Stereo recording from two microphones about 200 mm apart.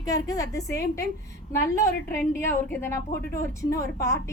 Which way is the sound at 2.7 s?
10° left (ahead or behind).